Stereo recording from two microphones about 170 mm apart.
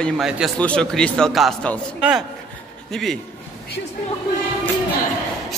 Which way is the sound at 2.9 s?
Centre (ahead or behind).